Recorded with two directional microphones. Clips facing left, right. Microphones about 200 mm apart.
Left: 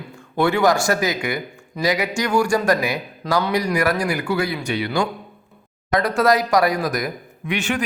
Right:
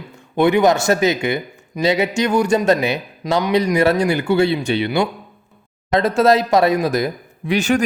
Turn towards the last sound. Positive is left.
turn(degrees=-40)  # may be behind; listen again after turning